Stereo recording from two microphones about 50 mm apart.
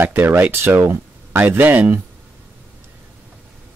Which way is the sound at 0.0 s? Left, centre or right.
Right.